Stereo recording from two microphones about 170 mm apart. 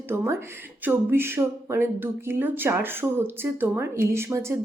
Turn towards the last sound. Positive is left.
turn(degrees=-15)  # may be behind; listen again after turning